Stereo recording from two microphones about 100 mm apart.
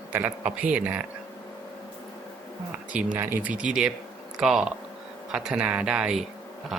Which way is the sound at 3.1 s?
25° right (ahead or behind).